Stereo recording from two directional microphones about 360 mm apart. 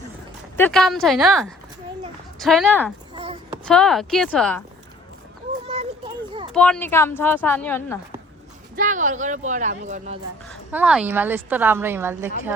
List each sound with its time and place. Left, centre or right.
0.5 s a woman's voice: centre
3.2 s a sound: centre
3.7 s a woman's voice: centre
5.6 s a sound: centre
6.5 s a woman's voice: centre
8.7 s speech: right
10.5 s a woman's voice: centre